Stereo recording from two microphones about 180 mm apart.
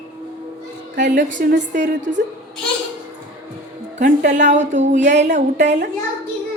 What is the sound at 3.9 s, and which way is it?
A woman's voice, 45° right (ahead or behind).